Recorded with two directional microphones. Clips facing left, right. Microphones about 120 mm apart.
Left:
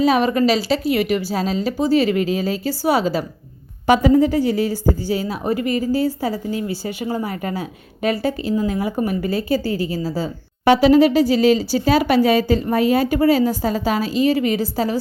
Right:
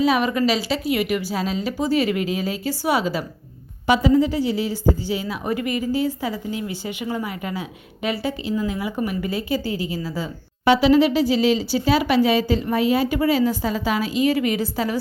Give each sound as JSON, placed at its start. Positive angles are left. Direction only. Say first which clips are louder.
{"t": 0.0, "sound": "a woman's voice", "louder": "left 3 dB", "side_deg": 40}
{"t": 3.8, "sound": "a woman's voice", "louder": "left 3 dB", "side_deg": 50}